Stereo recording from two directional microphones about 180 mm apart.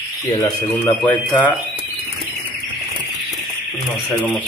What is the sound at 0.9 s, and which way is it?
Speech, 10° left (ahead or behind).